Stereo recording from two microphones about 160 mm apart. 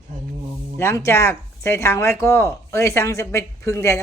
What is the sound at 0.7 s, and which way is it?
Speech, 15° left (ahead or behind).